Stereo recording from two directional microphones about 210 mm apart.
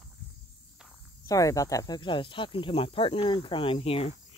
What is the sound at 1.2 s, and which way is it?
Speech, 15° left (ahead or behind).